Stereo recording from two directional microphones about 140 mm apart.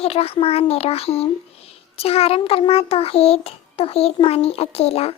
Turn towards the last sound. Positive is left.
turn(degrees=45)  # may be behind; listen again after turning